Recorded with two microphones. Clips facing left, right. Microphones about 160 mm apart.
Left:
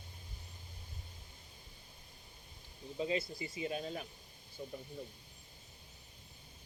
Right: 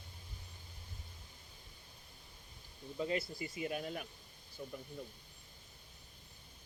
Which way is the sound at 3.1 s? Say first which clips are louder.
Left 1 dB; 20° left (ahead or behind).